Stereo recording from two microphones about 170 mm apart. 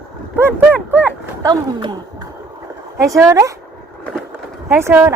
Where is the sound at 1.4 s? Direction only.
25° right (ahead or behind).